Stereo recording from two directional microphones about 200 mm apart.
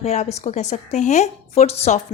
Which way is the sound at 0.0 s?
35° left (ahead or behind).